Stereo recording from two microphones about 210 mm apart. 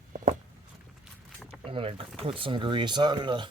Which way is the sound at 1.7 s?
25° right (ahead or behind).